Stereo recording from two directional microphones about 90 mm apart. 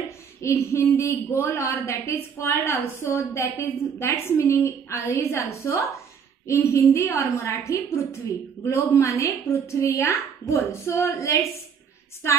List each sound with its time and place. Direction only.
0.4 s a woman's voice: 35° left (ahead or behind)